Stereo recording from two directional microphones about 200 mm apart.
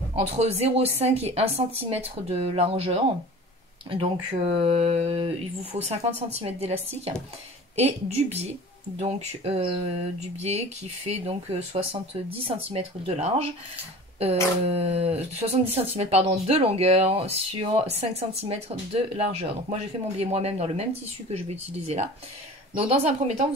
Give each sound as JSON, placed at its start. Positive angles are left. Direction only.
{"t": 0.1, "sound": "speech", "side_deg": -30}